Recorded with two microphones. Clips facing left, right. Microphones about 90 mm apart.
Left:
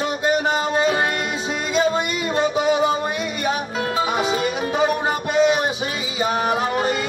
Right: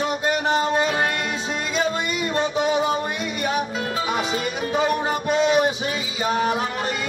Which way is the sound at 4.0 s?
10° left (ahead or behind).